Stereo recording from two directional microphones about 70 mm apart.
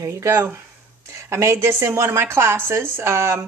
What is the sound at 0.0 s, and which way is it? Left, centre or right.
A woman's voice, right.